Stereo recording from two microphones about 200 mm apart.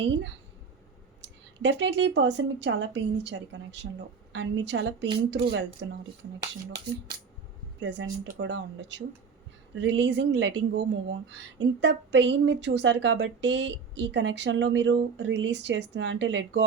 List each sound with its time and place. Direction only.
0.0 s a woman's voice: 60° right (ahead or behind)
7.8 s a woman's voice: 65° right (ahead or behind)